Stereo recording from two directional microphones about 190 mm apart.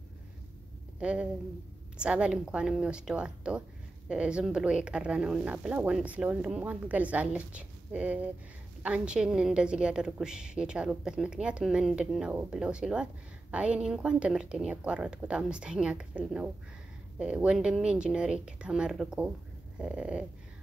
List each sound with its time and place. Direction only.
0.9 s a woman's voice: 5° right (ahead or behind)